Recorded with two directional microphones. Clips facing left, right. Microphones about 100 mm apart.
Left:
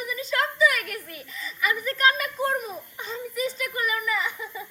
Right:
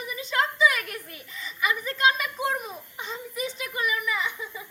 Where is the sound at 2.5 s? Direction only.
20° right (ahead or behind).